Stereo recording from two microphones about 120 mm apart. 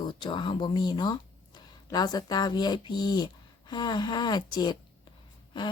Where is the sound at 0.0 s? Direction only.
40° left (ahead or behind).